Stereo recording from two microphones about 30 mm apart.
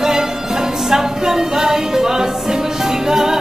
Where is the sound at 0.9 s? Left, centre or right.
Centre.